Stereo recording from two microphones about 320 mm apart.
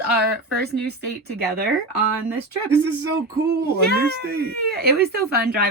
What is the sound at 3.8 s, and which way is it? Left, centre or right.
Speech, right.